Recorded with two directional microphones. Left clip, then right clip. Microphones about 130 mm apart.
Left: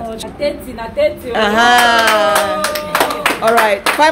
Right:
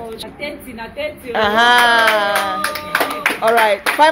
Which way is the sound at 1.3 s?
Centre (ahead or behind).